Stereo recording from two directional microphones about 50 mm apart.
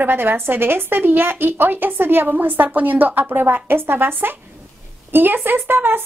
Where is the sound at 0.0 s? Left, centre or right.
Right.